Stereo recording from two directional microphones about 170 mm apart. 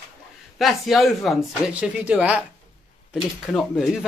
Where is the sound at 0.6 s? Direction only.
Centre (ahead or behind).